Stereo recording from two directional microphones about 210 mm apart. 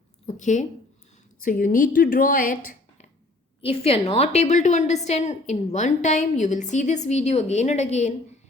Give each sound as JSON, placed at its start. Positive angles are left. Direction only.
{"t": 0.3, "sound": "a woman's voice", "side_deg": 35}
{"t": 3.6, "sound": "a woman's voice", "side_deg": 25}